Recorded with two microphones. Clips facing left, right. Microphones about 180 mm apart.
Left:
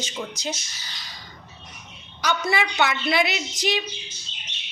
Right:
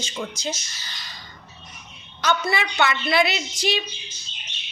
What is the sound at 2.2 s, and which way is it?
A woman's voice, 10° left (ahead or behind).